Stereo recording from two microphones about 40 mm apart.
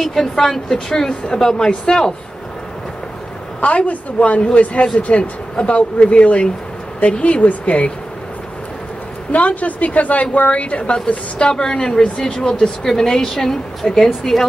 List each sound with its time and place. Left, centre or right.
0.0 s a woman's voice: centre
3.6 s a woman's voice: left
9.3 s a woman's voice: left
11.3 s a woman's voice: centre